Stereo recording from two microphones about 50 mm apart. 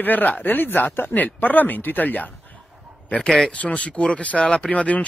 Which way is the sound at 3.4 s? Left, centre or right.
Left.